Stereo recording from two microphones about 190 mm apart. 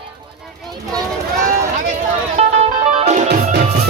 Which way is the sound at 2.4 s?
35° right (ahead or behind).